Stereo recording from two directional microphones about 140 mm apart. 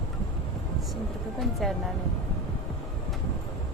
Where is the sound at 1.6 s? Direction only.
Centre (ahead or behind).